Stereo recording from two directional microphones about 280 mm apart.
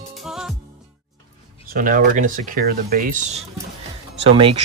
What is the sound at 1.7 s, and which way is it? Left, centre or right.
Speech, right.